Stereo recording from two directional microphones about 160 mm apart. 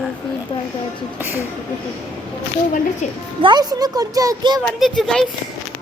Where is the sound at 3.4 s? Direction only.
30° right (ahead or behind).